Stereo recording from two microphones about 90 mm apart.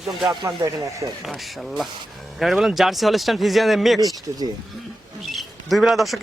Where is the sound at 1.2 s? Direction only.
Centre (ahead or behind).